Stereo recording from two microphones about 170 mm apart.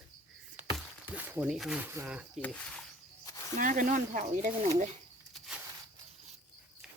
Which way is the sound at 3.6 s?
55° right (ahead or behind).